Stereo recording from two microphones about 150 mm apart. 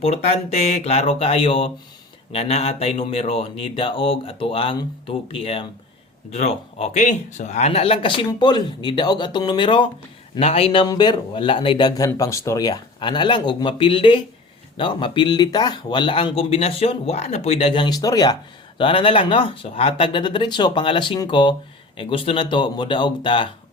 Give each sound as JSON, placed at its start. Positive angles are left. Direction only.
{"t": 0.0, "sound": "speech", "side_deg": 45}
{"t": 18.8, "sound": "speech", "side_deg": 35}